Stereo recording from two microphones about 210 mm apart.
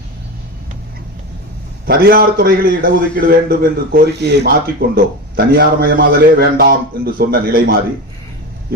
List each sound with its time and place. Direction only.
1.9 s a man's voice: 45° right (ahead or behind)